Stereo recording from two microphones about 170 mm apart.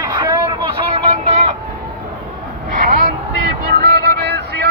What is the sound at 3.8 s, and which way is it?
Music, 70° right (ahead or behind).